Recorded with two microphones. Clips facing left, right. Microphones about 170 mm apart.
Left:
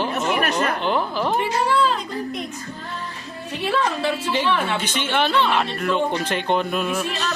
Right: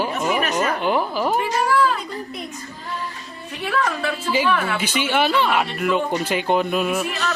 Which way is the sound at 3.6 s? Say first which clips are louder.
Left 1 dB; 30° left (ahead or behind).